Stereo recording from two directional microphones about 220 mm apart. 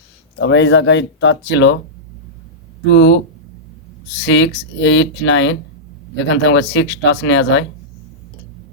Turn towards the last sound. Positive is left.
turn(degrees=55)  # may be behind; listen again after turning